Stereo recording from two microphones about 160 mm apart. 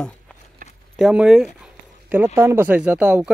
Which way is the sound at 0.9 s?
5° right (ahead or behind).